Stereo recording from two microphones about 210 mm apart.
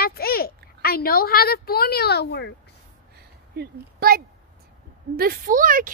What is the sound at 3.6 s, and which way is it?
A woman's voice, 45° right (ahead or behind).